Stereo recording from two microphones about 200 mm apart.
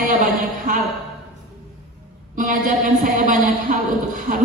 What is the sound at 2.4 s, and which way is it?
Speech, 40° right (ahead or behind).